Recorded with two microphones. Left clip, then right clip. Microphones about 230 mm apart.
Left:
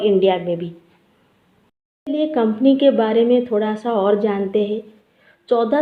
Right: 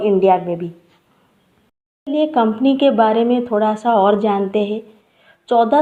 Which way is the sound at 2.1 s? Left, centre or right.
Right.